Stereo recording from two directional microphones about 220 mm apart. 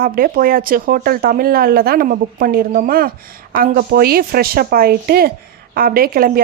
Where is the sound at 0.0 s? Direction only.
40° right (ahead or behind).